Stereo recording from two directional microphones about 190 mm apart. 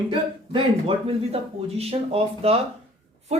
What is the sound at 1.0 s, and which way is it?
Speech, 30° right (ahead or behind).